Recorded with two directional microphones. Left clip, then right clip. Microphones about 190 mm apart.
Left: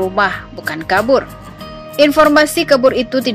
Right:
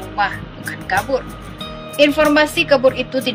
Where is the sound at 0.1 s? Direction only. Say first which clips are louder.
Left 5 dB; 20° left (ahead or behind).